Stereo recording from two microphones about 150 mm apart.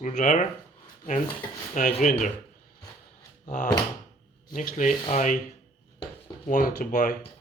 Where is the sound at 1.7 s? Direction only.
55° left (ahead or behind).